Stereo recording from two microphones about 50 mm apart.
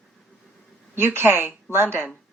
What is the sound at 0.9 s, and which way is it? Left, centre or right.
A woman's voice, right.